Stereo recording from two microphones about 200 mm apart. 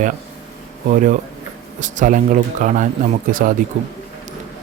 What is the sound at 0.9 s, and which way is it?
A man's voice, 40° right (ahead or behind).